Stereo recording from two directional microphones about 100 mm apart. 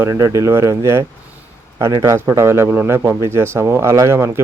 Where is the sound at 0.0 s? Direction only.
30° right (ahead or behind).